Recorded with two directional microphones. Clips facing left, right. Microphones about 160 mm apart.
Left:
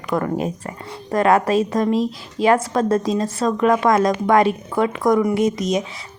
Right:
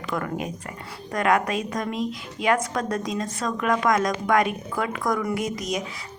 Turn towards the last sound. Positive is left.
turn(degrees=25)  # may be behind; listen again after turning